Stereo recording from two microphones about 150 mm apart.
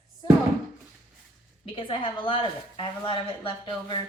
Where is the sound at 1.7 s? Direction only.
35° left (ahead or behind).